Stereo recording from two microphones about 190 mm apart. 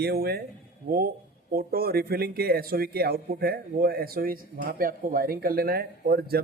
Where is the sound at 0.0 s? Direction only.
55° right (ahead or behind).